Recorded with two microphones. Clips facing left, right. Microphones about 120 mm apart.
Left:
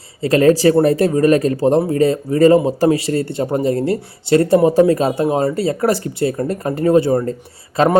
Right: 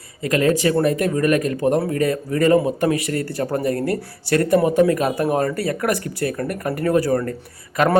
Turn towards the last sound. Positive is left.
turn(degrees=25)  # may be behind; listen again after turning